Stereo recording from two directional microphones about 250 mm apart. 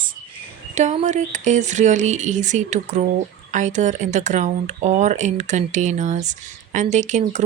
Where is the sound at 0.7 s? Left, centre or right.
Right.